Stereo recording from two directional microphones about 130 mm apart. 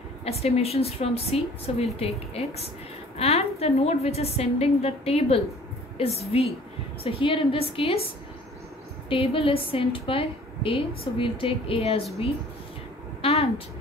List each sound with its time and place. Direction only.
0.2 s a woman's voice: 50° left (ahead or behind)
9.1 s a woman's voice: 45° left (ahead or behind)
13.2 s a sound: 55° left (ahead or behind)